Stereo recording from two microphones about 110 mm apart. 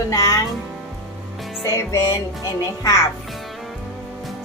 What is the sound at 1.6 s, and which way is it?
Music, 30° left (ahead or behind).